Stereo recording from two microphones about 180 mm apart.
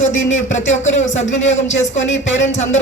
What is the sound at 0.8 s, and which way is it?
Speech, 40° left (ahead or behind).